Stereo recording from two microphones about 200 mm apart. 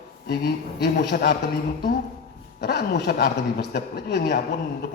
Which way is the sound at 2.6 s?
55° left (ahead or behind).